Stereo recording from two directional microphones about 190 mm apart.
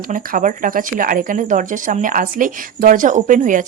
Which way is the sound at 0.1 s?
45° right (ahead or behind).